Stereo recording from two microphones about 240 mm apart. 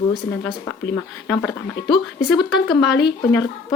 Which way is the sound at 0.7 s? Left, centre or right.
Centre.